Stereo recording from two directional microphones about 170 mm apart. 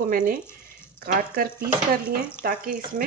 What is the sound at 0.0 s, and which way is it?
Speech, 55° right (ahead or behind).